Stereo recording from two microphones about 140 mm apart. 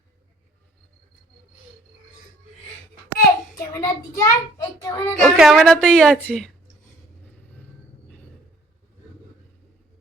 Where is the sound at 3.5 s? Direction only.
20° left (ahead or behind).